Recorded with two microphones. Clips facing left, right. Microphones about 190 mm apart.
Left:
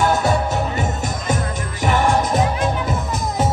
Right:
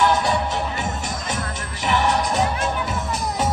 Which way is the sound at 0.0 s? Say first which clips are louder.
Left 2 dB; 45° left (ahead or behind).